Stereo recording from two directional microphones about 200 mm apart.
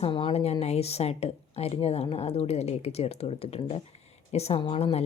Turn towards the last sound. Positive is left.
turn(degrees=30)  # may be behind; listen again after turning